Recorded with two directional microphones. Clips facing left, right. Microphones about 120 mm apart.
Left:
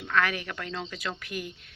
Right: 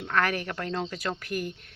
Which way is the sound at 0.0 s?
40° right (ahead or behind).